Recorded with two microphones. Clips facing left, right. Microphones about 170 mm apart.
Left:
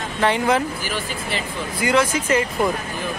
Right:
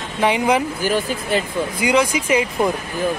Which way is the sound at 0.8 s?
45° right (ahead or behind).